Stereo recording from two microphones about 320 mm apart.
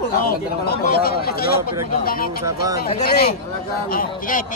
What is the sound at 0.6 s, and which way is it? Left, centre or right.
Speech, left.